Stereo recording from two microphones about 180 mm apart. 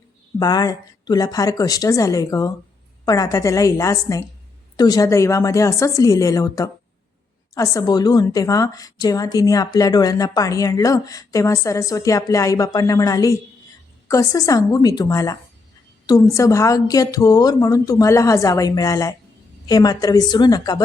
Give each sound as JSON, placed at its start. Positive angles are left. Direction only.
{"t": 0.3, "sound": "a woman's voice", "side_deg": 20}